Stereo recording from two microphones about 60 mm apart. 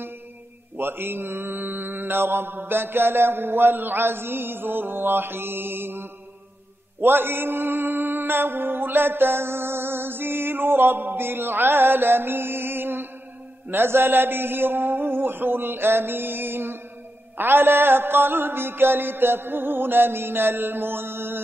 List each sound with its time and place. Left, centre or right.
0.7 s mantra: right